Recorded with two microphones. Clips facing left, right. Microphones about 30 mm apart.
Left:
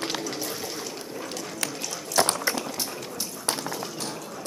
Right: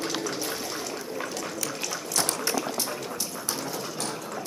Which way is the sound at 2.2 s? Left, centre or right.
Left.